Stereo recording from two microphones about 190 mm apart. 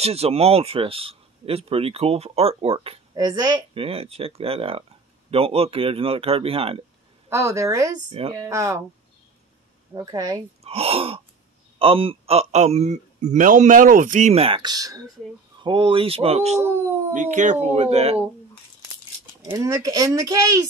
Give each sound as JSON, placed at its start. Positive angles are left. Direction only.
{"t": 0.0, "sound": "speech", "side_deg": -30}
{"t": 3.2, "sound": "speech", "side_deg": -20}
{"t": 7.2, "sound": "a child's voice", "side_deg": -15}
{"t": 9.9, "sound": "speech", "side_deg": -20}
{"t": 10.6, "sound": "speech", "side_deg": -30}
{"t": 19.4, "sound": "a child's voice", "side_deg": -15}